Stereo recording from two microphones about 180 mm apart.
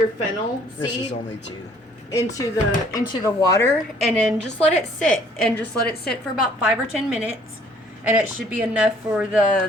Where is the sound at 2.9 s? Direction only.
20° left (ahead or behind).